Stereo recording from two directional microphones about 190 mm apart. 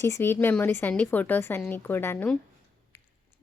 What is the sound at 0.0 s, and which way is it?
A woman's voice, 15° left (ahead or behind).